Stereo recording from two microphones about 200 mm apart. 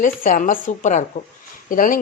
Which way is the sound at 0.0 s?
45° left (ahead or behind).